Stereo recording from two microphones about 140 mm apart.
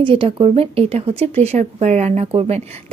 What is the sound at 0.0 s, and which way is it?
A woman's voice, 40° right (ahead or behind).